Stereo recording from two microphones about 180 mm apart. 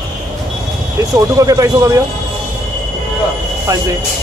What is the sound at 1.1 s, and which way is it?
Speech, 20° right (ahead or behind).